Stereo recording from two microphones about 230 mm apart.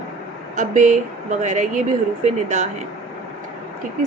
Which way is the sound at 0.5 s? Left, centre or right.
Right.